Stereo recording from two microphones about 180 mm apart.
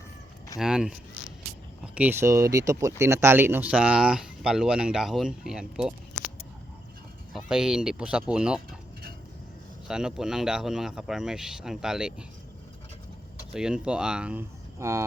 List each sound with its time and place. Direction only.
0.6 s speech: 5° right (ahead or behind)
7.3 s speech: 5° right (ahead or behind)
9.8 s speech: 5° right (ahead or behind)
13.5 s speech: 5° right (ahead or behind)